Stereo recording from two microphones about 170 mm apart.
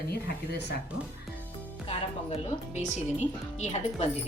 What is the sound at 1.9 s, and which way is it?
A woman's voice, 35° left (ahead or behind).